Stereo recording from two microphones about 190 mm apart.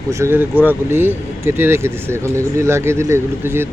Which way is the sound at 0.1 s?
15° right (ahead or behind).